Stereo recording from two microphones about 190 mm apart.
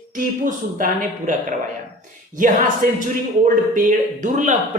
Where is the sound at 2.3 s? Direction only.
45° right (ahead or behind).